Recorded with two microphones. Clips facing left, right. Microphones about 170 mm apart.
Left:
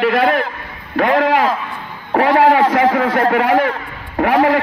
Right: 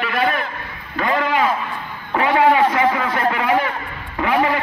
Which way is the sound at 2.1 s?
65° left (ahead or behind).